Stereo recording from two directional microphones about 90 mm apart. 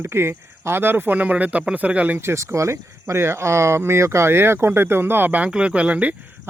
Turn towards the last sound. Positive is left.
turn(degrees=-15)  # may be behind; listen again after turning